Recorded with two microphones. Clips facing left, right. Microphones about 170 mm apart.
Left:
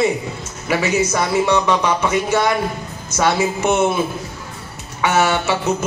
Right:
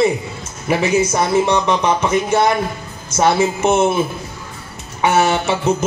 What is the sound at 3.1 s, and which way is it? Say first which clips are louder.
Speech: right 3 dB; 30° right (ahead or behind).